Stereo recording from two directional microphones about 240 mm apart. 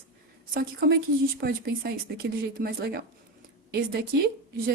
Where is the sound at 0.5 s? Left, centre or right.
Right.